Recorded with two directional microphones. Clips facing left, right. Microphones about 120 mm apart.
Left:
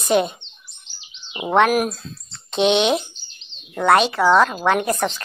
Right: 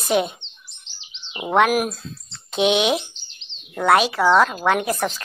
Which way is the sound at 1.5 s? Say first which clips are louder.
Left 1 dB; 5° right (ahead or behind).